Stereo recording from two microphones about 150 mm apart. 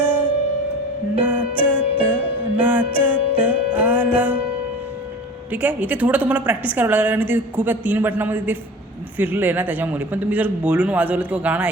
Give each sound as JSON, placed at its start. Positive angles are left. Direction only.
{"t": 0.0, "sound": "music", "side_deg": -10}
{"t": 1.5, "sound": "music", "side_deg": -10}
{"t": 5.5, "sound": "a woman's voice", "side_deg": -10}